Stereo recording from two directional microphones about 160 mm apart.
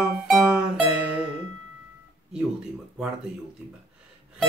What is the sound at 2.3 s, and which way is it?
Telephone dialing, 5° right (ahead or behind).